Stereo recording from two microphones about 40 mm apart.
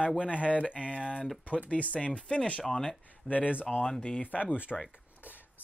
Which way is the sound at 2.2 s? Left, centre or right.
Left.